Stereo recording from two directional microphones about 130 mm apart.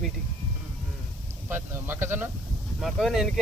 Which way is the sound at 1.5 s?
15° right (ahead or behind).